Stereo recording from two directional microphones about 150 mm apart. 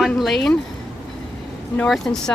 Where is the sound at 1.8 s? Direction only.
Centre (ahead or behind).